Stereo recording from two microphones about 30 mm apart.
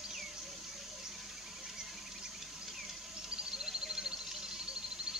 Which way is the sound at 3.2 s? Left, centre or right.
Right.